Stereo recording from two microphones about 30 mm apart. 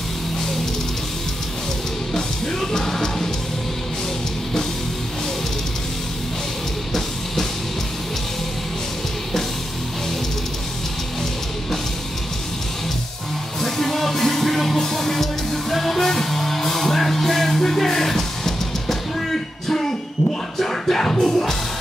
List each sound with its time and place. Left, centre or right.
2.1 s music: centre
13.6 s music: centre